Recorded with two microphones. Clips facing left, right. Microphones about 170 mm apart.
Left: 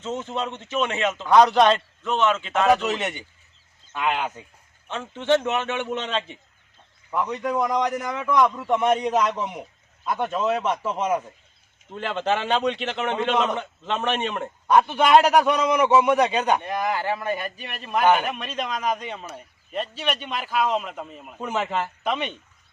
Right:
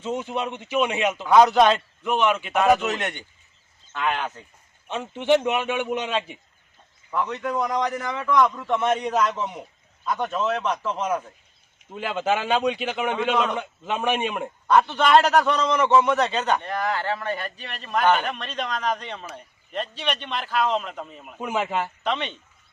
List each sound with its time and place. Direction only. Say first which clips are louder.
0.0 s speech: right 1 dB; 15° right (ahead or behind)
1.3 s a man's voice: even; 5° right (ahead or behind)
4.9 s speech: right 1 dB; 15° right (ahead or behind)
7.1 s a man's voice: left 1 dB; 10° left (ahead or behind)
9.0 s a man's voice: left 1 dB; centre (ahead or behind)
9.3 s a man's voice: even; 10° left (ahead or behind)
11.9 s speech: even; 5° right (ahead or behind)
14.7 s a man's voice: left 1 dB; 10° left (ahead or behind); by 21.8 s 5° right (ahead or behind)
22.0 s a man's voice: even; 10° left (ahead or behind)